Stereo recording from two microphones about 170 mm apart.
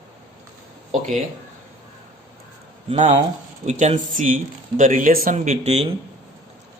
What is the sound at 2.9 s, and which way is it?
A man's voice, 40° right (ahead or behind).